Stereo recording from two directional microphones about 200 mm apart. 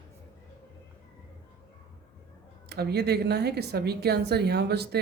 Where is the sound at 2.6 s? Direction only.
55° right (ahead or behind).